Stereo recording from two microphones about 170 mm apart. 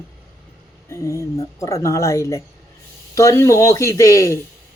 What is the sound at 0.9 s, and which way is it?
Speech, 20° left (ahead or behind).